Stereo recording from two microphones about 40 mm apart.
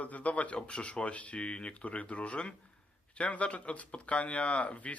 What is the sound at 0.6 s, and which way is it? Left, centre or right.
Speech, left.